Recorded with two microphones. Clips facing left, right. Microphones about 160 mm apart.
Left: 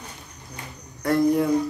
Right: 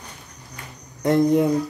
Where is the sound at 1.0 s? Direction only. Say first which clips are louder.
Right 3 dB; 20° right (ahead or behind).